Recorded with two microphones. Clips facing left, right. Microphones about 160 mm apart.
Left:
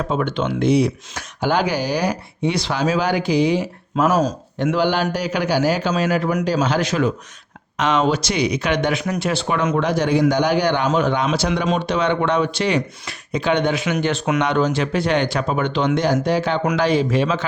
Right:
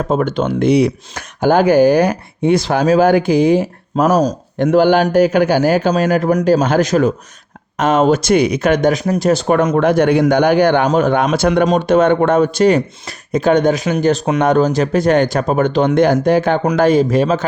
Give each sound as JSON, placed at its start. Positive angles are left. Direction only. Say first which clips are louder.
{"t": 0.0, "sound": "speech", "louder": "right 5 dB", "side_deg": -45}
{"t": 0.7, "sound": "speech", "louder": "right 4 dB", "side_deg": -60}